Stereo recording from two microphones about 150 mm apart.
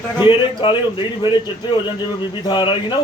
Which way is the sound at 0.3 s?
35° left (ahead or behind).